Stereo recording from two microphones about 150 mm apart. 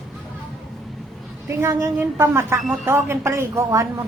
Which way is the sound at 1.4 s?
20° right (ahead or behind).